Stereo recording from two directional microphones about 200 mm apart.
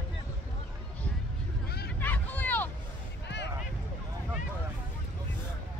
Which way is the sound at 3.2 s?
60° left (ahead or behind).